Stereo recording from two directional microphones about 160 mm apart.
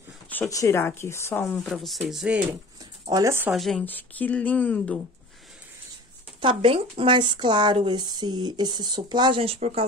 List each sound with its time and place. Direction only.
0.3 s a woman's voice: 15° left (ahead or behind)
1.6 s speech: centre (ahead or behind)
2.8 s a sound: 25° right (ahead or behind)
3.5 s a woman's voice: centre (ahead or behind)
6.4 s speech: 30° right (ahead or behind)